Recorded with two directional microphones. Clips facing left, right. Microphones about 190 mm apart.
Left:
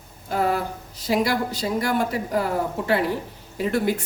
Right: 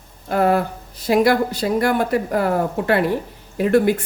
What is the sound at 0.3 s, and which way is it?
Speech, 60° right (ahead or behind).